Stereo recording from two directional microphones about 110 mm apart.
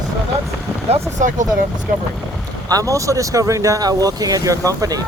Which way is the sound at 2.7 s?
30° right (ahead or behind).